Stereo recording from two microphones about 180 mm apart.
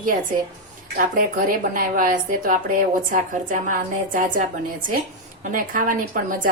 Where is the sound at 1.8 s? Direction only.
50° right (ahead or behind).